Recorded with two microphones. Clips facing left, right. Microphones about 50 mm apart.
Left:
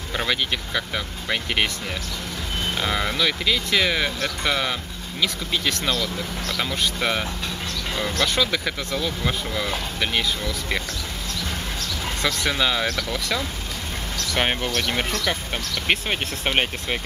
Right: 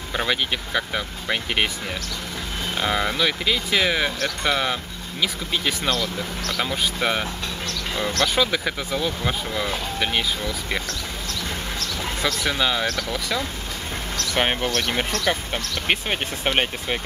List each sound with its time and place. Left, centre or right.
0.1 s speech: centre
2.8 s speech: centre
8.4 s speech: centre
12.4 s speech: centre
15.1 s speech: right
15.5 s speech: centre